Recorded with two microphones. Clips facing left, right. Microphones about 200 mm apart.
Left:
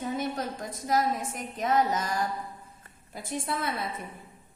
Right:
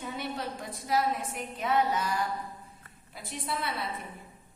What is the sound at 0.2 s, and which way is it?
A woman's voice, 45° left (ahead or behind).